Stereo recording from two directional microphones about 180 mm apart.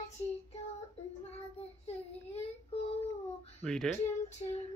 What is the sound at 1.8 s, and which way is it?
Child singing, 35° left (ahead or behind).